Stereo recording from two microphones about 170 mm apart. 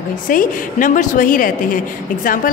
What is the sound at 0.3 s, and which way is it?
A woman's voice, 50° left (ahead or behind).